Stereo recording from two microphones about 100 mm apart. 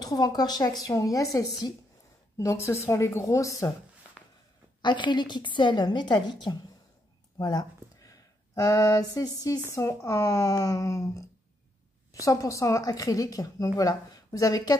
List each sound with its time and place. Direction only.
0.0 s a woman's voice: 40° left (ahead or behind)
4.8 s a woman's voice: 50° left (ahead or behind)
7.3 s a sound: 40° left (ahead or behind)
9.8 s a woman's voice: 30° left (ahead or behind)